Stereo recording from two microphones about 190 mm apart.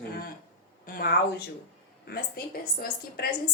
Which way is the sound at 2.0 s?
55° left (ahead or behind).